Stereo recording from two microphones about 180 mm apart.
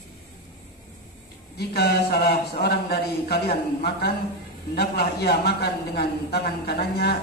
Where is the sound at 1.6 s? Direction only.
60° left (ahead or behind).